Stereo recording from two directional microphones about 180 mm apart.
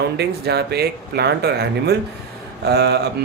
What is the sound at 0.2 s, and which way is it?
Speech, 65° right (ahead or behind).